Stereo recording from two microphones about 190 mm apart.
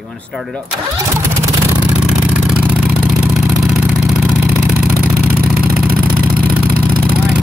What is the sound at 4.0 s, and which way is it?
Vehicle, 5° right (ahead or behind).